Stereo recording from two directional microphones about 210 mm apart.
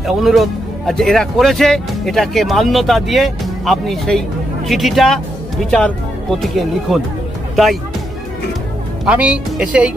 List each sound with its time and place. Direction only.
0.0 s speech: centre (ahead or behind)
9.0 s speech: 5° right (ahead or behind)